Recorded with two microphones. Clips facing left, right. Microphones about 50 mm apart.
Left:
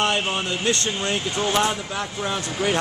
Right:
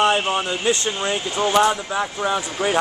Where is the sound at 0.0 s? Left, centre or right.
Centre.